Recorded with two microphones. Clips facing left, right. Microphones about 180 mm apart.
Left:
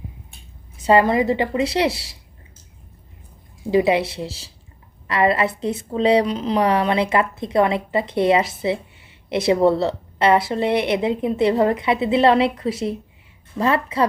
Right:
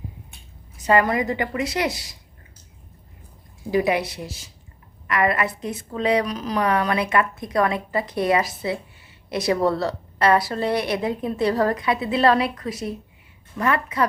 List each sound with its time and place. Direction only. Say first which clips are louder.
0.8 s a woman's voice: left 4 dB; 25° left (ahead or behind)
3.7 s a woman's voice: left 4 dB; 25° left (ahead or behind)